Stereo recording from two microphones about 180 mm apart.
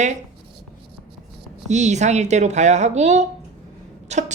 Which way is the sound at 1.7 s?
40° right (ahead or behind).